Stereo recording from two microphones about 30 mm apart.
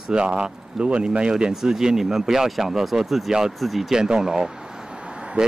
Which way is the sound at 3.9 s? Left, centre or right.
Right.